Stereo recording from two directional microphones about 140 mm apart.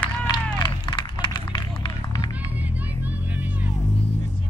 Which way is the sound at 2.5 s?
10° right (ahead or behind).